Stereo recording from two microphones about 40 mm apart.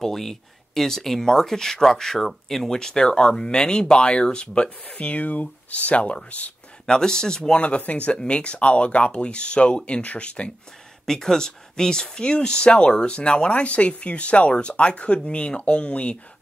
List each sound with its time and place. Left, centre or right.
0.0 s speech: centre
2.8 s speech: centre
4.8 s speech: left
6.9 s speech: centre
7.5 s speech: left
11.1 s speech: centre; by 16.2 s left